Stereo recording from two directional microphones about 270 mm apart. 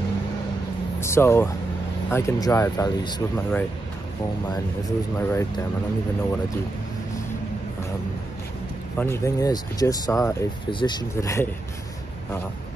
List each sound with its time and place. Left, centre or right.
1.0 s speech: centre
4.8 s speech: centre
8.9 s speech: centre